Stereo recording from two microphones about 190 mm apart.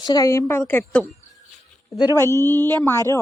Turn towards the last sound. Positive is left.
turn(degrees=15)  # may be behind; listen again after turning